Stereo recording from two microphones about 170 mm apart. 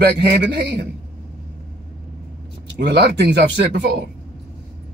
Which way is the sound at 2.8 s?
80° right.